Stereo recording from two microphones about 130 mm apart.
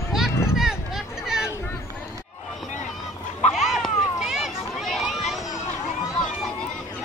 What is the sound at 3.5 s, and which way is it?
Children playing, centre (ahead or behind).